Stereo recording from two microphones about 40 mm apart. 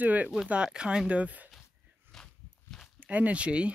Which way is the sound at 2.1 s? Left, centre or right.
Centre.